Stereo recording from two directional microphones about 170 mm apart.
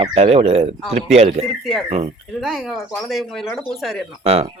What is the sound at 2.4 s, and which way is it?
Speech, centre (ahead or behind).